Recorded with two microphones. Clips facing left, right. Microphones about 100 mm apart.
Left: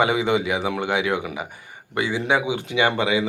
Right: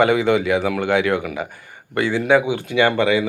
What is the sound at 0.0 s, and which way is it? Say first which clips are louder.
Speech: right 4 dB; 15° left (ahead or behind).